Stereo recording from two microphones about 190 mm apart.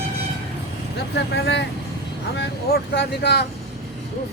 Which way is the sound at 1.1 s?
70° left (ahead or behind).